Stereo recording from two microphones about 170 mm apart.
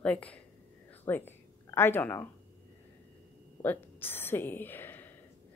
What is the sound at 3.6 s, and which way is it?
A woman's voice, 10° left (ahead or behind).